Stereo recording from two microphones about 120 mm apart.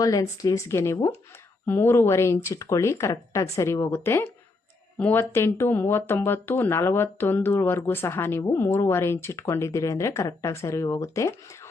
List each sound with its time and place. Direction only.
0.0 s speech: 30° left (ahead or behind)